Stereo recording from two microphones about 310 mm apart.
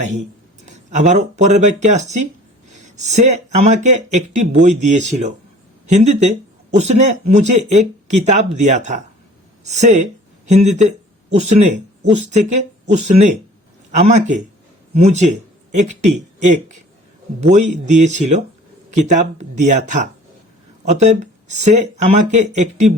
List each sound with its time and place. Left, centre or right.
0.6 s speech: right